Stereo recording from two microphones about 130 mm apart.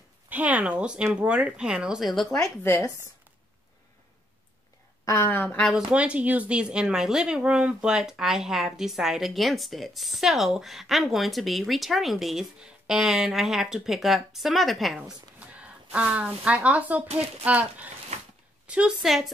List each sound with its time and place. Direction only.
0.3 s speech: 10° right (ahead or behind)
2.6 s speech: 20° left (ahead or behind)
5.0 s a woman's voice: 20° left (ahead or behind)
5.7 s speech: 5° right (ahead or behind)